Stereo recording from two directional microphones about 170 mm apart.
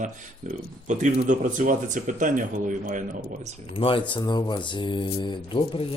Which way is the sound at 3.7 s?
30° left (ahead or behind).